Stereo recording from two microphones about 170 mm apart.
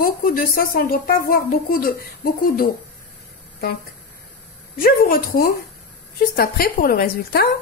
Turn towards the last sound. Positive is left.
turn(degrees=60)  # may be behind; listen again after turning